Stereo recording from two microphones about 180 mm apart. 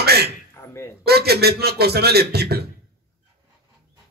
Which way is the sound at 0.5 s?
15° left (ahead or behind).